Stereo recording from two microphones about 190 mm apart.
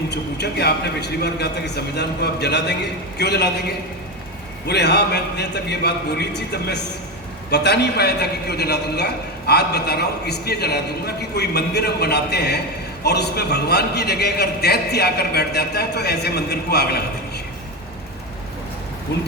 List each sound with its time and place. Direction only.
0.1 s a man's voice: 60° left (ahead or behind)
4.6 s a man's voice: 60° left (ahead or behind)
19.1 s a man's voice: 60° left (ahead or behind)